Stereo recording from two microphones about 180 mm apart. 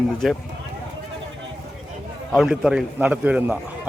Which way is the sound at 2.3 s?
Centre (ahead or behind).